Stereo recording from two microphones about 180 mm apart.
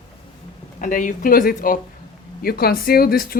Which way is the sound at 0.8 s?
45° left (ahead or behind).